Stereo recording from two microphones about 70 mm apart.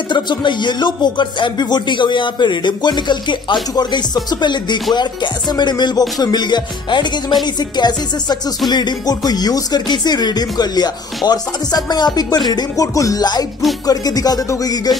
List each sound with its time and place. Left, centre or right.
0.1 s music: left
3.7 s music: left
8.6 s speech: left
12.7 s music: left
13.2 s speech: left
13.8 s music: left